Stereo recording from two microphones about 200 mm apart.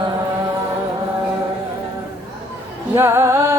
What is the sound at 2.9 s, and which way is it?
Music, 10° right (ahead or behind).